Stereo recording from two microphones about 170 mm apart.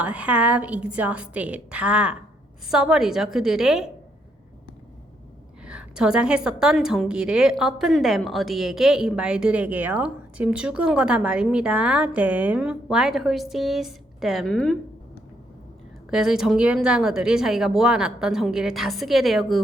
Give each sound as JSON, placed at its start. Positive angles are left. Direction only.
{"t": 0.0, "sound": "a woman's voice", "side_deg": -10}
{"t": 5.6, "sound": "a woman's voice", "side_deg": -5}
{"t": 16.0, "sound": "a woman's voice", "side_deg": -5}